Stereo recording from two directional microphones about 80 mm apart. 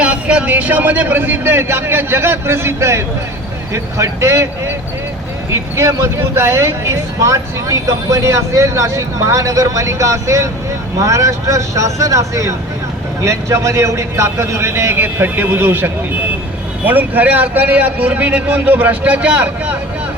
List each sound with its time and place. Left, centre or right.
0.0 s a man's voice: centre